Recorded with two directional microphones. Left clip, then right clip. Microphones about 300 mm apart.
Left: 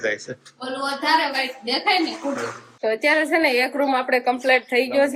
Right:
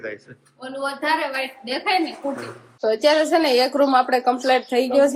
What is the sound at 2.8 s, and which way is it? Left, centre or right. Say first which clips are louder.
A woman's voice: right 2 dB; centre.